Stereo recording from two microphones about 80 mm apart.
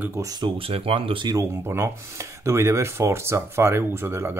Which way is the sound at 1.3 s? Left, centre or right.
Right.